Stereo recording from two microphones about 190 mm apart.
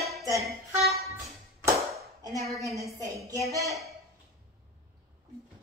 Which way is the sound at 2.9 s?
15° right (ahead or behind).